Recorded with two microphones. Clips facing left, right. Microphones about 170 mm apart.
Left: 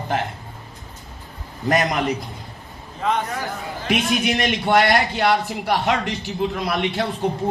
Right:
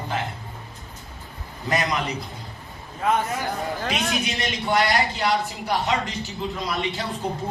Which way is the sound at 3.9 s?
60° left (ahead or behind).